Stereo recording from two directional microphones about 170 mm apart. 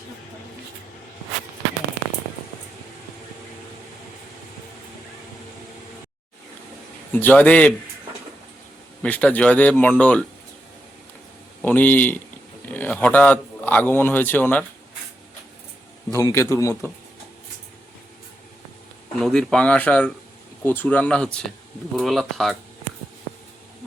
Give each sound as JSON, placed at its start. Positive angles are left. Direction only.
{"t": 7.1, "sound": "speech", "side_deg": 10}
{"t": 9.0, "sound": "speech", "side_deg": 10}
{"t": 11.6, "sound": "a man's voice", "side_deg": 10}
{"t": 16.1, "sound": "speech", "side_deg": 15}
{"t": 19.1, "sound": "speech", "side_deg": 5}